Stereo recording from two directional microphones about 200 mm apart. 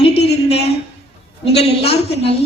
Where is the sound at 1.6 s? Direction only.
30° left (ahead or behind).